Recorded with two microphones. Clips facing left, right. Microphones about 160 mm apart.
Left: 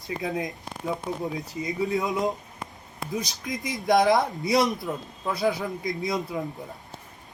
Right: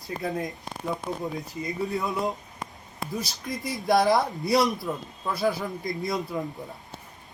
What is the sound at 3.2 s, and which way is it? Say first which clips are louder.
Speech: left 2 dB; centre (ahead or behind).